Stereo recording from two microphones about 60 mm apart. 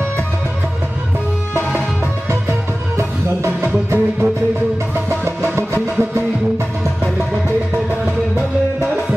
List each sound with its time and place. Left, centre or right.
3.0 s music: right